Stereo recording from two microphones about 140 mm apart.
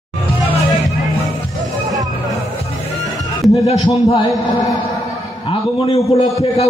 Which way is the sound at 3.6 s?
45° left (ahead or behind).